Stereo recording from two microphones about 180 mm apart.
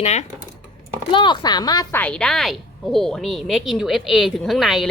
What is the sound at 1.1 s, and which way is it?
Speech, 25° left (ahead or behind).